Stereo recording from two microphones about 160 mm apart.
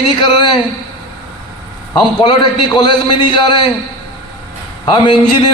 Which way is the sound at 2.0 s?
30° left (ahead or behind).